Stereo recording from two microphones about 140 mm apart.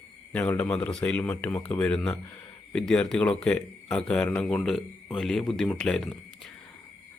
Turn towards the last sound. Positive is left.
turn(degrees=0)  # may be behind; listen again after turning